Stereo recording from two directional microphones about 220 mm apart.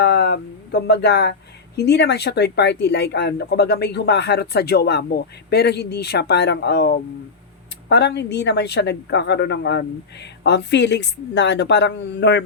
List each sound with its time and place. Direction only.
0.0 s speech: 50° left (ahead or behind)